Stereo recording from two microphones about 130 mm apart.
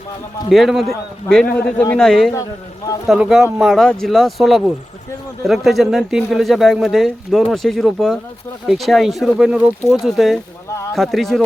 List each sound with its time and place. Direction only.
0.5 s speech: centre (ahead or behind)
10.7 s a sound: 25° left (ahead or behind)
10.9 s speech: centre (ahead or behind)